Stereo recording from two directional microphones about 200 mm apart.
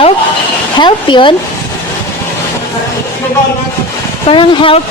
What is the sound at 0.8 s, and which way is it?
Speech, 25° left (ahead or behind).